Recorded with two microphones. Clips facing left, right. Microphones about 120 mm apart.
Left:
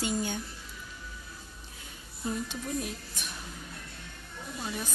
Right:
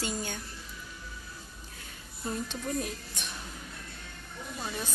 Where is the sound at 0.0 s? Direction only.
20° left (ahead or behind).